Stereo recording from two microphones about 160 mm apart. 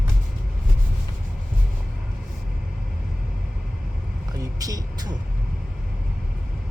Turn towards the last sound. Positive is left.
turn(degrees=-25)  # may be behind; listen again after turning